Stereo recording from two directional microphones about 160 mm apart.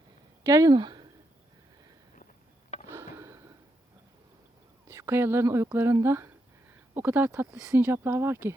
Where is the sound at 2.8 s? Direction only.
15° right (ahead or behind).